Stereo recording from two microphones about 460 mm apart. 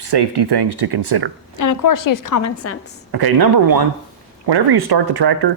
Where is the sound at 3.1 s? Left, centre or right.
Right.